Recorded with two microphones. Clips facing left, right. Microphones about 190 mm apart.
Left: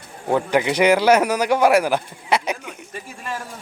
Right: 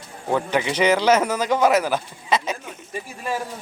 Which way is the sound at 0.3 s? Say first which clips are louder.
Left 3 dB; 15° left (ahead or behind).